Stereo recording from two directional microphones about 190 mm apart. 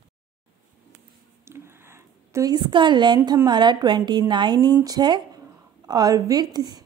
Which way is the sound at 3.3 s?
20° right (ahead or behind).